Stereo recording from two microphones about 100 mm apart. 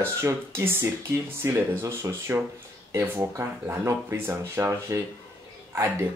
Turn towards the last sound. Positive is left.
turn(degrees=-25)  # may be behind; listen again after turning